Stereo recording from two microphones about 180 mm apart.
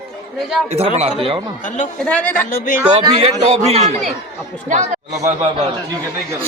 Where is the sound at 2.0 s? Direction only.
5° left (ahead or behind).